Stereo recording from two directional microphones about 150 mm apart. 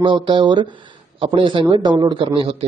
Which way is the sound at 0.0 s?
35° right (ahead or behind).